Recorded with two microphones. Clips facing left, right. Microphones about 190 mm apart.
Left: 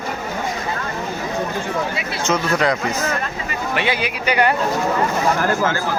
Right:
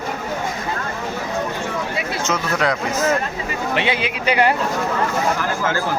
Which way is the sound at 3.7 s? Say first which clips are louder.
Even; 25° right (ahead or behind).